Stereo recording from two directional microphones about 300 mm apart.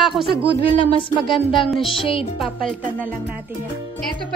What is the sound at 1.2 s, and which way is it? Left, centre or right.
Speech, centre.